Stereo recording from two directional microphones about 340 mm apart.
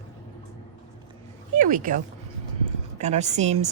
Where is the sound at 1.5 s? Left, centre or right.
Right.